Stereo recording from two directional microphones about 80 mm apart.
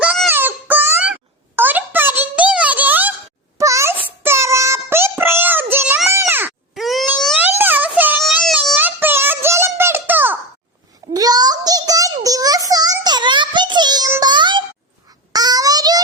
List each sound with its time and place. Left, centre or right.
0.3 s wail: right
1.5 s a sound: right
3.6 s wail: right
4.0 s child singing: right
6.1 s grunt: right
6.7 s a sound: centre
7.3 s a sound: right
8.2 s baby cry: centre
8.8 s music: right
11.1 s child singing: right
14.2 s music: right
15.3 s a sound: right